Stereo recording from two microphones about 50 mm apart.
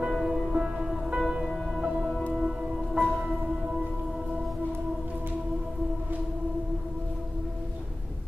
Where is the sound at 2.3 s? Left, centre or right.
Centre.